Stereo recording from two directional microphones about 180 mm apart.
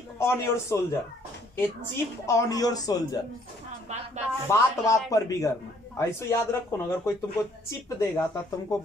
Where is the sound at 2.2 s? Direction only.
15° left (ahead or behind).